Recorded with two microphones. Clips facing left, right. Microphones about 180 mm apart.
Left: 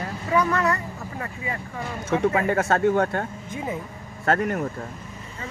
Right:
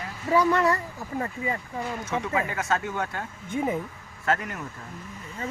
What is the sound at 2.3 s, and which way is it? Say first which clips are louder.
Speech: left 5 dB; 45° left (ahead or behind).